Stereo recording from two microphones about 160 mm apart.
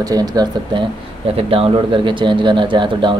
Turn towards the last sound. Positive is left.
turn(degrees=-30)  # may be behind; listen again after turning